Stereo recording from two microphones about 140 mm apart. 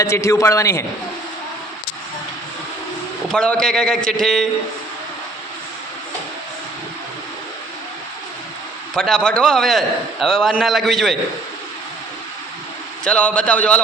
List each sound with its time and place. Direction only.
0.0 s a man's voice: 20° left (ahead or behind)
3.2 s a man's voice: 5° left (ahead or behind)
9.0 s a man's voice: 5° left (ahead or behind)
13.1 s a man's voice: 10° left (ahead or behind)